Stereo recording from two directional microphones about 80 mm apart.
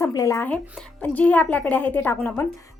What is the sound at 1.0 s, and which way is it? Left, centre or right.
A woman's voice, centre.